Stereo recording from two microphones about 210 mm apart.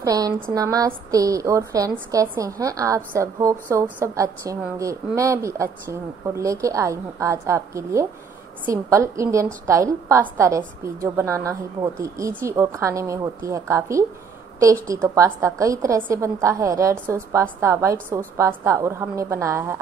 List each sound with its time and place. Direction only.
0.0 s a woman's voice: 15° right (ahead or behind)